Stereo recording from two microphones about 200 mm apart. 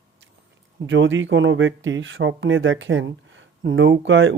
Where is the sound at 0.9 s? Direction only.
70° right (ahead or behind).